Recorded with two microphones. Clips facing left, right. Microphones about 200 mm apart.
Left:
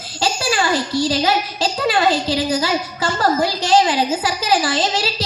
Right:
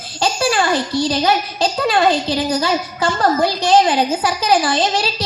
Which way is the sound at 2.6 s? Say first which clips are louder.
Right 2 dB; 55° right (ahead or behind).